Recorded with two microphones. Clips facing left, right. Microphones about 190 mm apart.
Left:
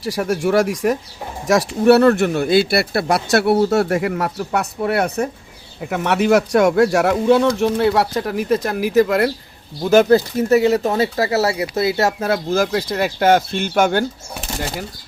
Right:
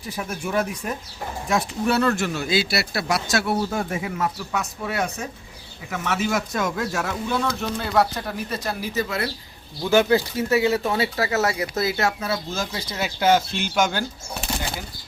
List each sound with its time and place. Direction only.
0.0 s speech: 85° left
1.5 s speech: 75° left (ahead or behind)
8.6 s speech: 60° left (ahead or behind)
9.9 s speech: 40° left (ahead or behind); by 14.0 s 55° left (ahead or behind)